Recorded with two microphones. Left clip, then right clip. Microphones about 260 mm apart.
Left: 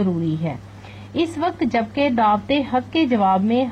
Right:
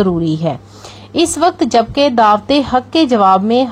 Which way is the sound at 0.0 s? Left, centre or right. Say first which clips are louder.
Right 9 dB; right.